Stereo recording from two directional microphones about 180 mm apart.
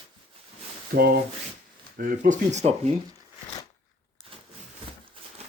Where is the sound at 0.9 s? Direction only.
55° right (ahead or behind).